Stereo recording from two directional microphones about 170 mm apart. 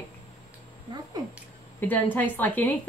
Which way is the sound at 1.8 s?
10° left (ahead or behind).